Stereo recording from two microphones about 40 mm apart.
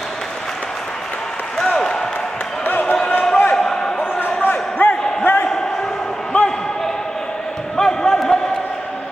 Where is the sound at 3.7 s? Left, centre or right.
Left.